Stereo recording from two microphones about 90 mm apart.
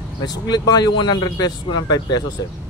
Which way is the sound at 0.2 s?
50° left (ahead or behind).